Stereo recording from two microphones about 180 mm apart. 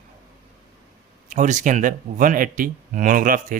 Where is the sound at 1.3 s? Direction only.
45° right (ahead or behind).